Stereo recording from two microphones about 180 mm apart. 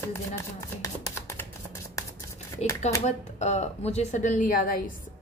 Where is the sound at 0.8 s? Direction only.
20° left (ahead or behind).